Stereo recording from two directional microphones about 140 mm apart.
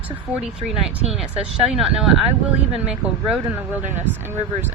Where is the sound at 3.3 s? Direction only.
10° right (ahead or behind).